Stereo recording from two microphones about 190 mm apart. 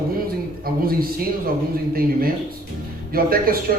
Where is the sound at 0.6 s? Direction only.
50° right (ahead or behind).